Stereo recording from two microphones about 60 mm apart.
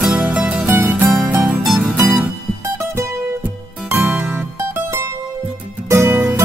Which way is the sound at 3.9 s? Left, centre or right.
Right.